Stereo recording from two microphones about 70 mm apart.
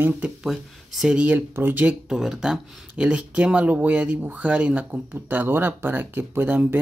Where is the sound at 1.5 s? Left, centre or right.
Right.